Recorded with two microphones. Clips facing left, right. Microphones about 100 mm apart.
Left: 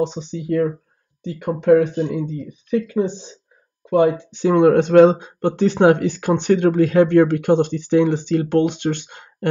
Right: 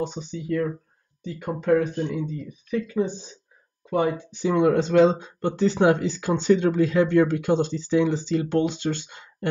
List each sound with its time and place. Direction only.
0.0 s speech: 90° left; by 1.5 s 75° left (ahead or behind)
1.9 s speech: 20° left (ahead or behind)
2.3 s speech: 50° left (ahead or behind)
4.3 s speech: 60° left (ahead or behind)